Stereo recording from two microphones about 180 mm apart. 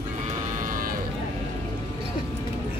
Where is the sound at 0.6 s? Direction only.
50° right (ahead or behind).